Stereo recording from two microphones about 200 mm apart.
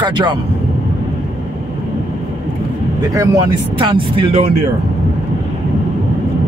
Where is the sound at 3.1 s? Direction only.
15° right (ahead or behind).